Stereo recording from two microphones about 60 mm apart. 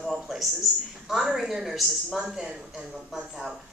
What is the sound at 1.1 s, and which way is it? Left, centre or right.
A woman's voice, centre.